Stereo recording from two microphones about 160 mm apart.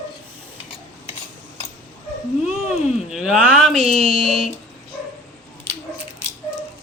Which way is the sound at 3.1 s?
5° right (ahead or behind).